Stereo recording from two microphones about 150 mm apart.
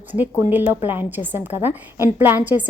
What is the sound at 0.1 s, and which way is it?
A woman's voice, 10° right (ahead or behind).